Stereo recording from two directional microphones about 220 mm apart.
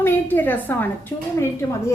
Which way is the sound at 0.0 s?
10° left (ahead or behind).